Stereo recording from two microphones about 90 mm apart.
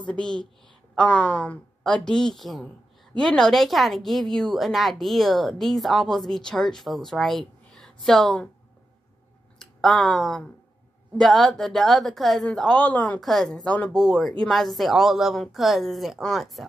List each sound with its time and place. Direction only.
0.0 s a woman's voice: 10° left (ahead or behind)
9.6 s a woman's voice: 5° left (ahead or behind)
13.2 s a woman's voice: centre (ahead or behind)